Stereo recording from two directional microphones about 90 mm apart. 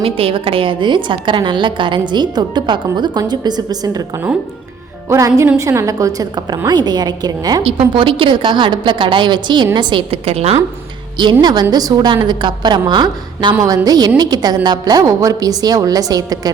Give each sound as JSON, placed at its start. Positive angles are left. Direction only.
{"t": 0.0, "sound": "a woman's voice", "side_deg": -90}
{"t": 5.0, "sound": "a woman's voice", "side_deg": -35}
{"t": 7.6, "sound": "a woman's voice", "side_deg": -75}
{"t": 11.2, "sound": "a woman's voice", "side_deg": -55}
{"t": 13.6, "sound": "a woman's voice", "side_deg": -45}
{"t": 15.0, "sound": "a woman's voice", "side_deg": -40}